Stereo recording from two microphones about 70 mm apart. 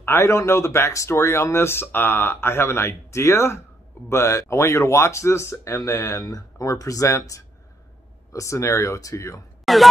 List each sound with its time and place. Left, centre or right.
0.0 s speech: left
9.7 s speech: centre